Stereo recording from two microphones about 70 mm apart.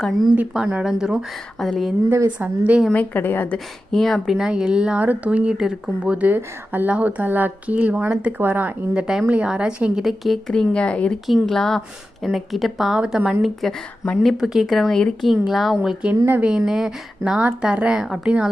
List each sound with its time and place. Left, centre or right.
0.5 s a woman's voice: centre
1.5 s speech: centre
2.4 s speech: right
2.9 s a woman's voice: left
3.9 s speech: centre
4.4 s a woman's voice: centre
6.3 s speech: right
8.9 s a woman's voice: centre
10.0 s speech: centre
10.5 s speech: centre
11.3 s a woman's voice: centre
13.6 s a woman's voice: centre